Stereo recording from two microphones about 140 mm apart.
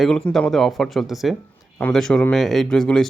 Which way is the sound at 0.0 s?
5° left (ahead or behind).